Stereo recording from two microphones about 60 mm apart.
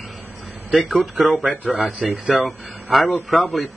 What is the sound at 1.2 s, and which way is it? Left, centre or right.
Speech, right.